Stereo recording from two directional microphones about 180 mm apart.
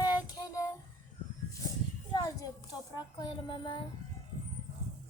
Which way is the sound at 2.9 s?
25° left (ahead or behind).